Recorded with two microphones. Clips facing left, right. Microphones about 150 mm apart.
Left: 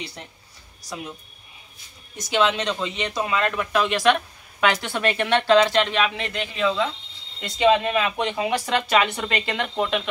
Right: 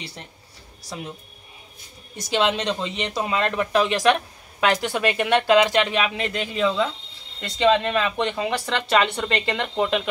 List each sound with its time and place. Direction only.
0.9 s speech: 30° right (ahead or behind)
2.1 s speech: 30° right (ahead or behind)
4.1 s speech: 5° right (ahead or behind)
7.3 s speech: 10° left (ahead or behind)